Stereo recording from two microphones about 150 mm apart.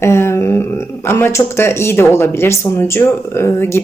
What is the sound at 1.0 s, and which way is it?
Speech, 15° left (ahead or behind).